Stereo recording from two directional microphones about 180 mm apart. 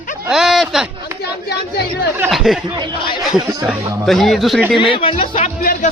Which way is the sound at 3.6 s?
Centre (ahead or behind).